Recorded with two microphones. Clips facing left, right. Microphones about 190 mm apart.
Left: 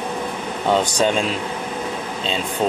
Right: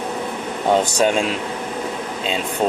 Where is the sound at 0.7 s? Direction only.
10° right (ahead or behind).